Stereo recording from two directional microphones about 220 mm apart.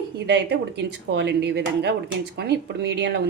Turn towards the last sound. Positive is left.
turn(degrees=-50)  # may be behind; listen again after turning